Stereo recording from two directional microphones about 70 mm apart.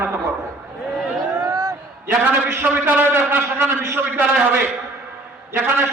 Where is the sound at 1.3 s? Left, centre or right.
Right.